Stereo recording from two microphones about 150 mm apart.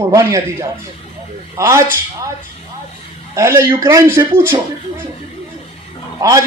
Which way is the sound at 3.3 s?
20° right (ahead or behind).